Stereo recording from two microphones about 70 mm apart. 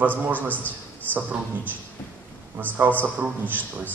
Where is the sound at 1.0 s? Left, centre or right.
Left.